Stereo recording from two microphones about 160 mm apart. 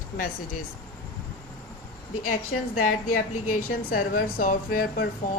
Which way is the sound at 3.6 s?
65° left (ahead or behind).